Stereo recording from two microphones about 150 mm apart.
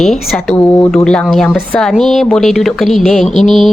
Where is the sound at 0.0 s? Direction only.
Centre (ahead or behind).